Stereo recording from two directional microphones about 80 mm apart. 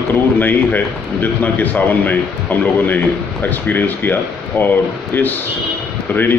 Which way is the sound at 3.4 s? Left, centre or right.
Left.